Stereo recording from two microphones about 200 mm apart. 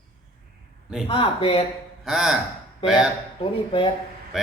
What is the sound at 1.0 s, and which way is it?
Speech, 25° left (ahead or behind).